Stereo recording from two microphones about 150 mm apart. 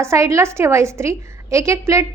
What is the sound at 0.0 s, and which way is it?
A woman's voice, 20° right (ahead or behind).